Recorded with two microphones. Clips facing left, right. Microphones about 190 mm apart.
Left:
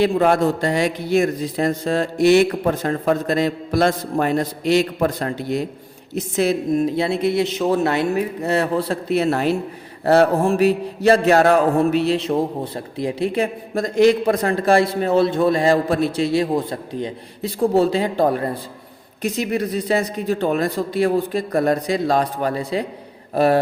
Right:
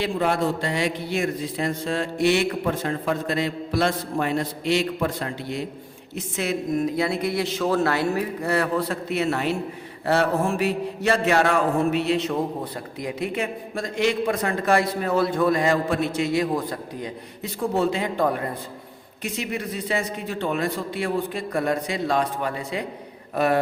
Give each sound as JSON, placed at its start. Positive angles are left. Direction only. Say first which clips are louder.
{"t": 0.0, "sound": "a man's voice", "louder": "left 7 dB", "side_deg": 45}
{"t": 10.1, "sound": "mantra", "louder": "left 6 dB", "side_deg": 35}